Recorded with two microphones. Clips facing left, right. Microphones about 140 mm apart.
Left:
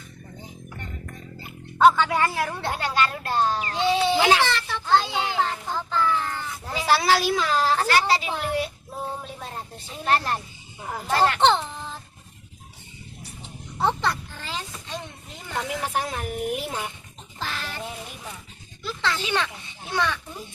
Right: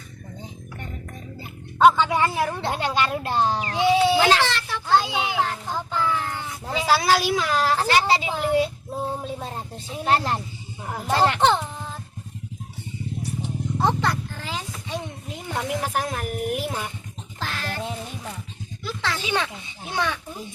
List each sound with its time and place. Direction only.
0.8 s speech: 10° right (ahead or behind)
4.2 s a child's voice: 5° left (ahead or behind); by 6.8 s 15° right (ahead or behind)
6.8 s speech: centre (ahead or behind)
7.9 s a woman's voice: 20° right (ahead or behind)
10.8 s speech: 5° right (ahead or behind)
11.1 s a woman's voice: 20° right (ahead or behind)
11.3 s a sound: 5° right (ahead or behind)
13.2 s a sound: centre (ahead or behind)
15.6 s speech: centre (ahead or behind)
17.4 s quack: centre (ahead or behind)
18.8 s a sound: centre (ahead or behind)
19.2 s a child's voice: 15° right (ahead or behind)